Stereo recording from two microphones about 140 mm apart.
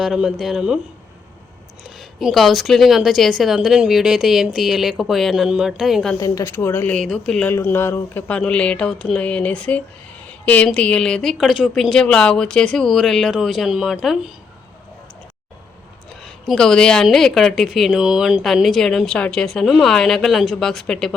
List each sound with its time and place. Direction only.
0.0 s a woman's voice: 5° right (ahead or behind)
2.0 s a woman's voice: centre (ahead or behind)
6.1 s speech: 25° left (ahead or behind); by 7.5 s 5° left (ahead or behind)
7.5 s a woman's voice: 15° left (ahead or behind); by 14.3 s 5° right (ahead or behind)
16.2 s a woman's voice: 5° left (ahead or behind)